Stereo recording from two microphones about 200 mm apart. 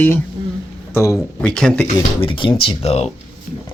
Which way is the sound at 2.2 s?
25° left (ahead or behind).